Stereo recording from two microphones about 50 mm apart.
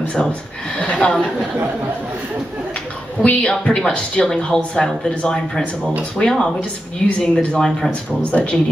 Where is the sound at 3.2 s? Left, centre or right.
Left.